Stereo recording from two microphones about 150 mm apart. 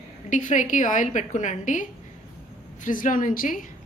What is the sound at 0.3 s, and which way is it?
A woman's voice, 55° left (ahead or behind).